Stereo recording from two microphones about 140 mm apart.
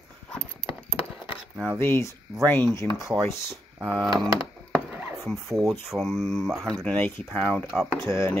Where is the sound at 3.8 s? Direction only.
Centre (ahead or behind).